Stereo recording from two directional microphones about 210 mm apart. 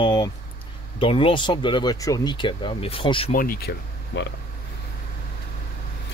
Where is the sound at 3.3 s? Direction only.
45° left (ahead or behind).